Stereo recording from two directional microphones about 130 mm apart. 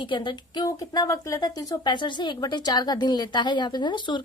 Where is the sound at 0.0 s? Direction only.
40° left (ahead or behind).